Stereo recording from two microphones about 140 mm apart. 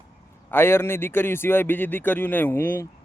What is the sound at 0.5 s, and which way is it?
Speech, 15° left (ahead or behind).